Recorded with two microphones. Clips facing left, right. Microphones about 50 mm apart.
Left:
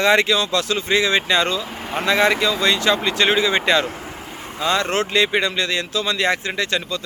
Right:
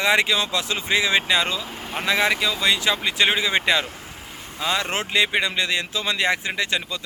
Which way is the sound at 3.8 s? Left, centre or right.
Left.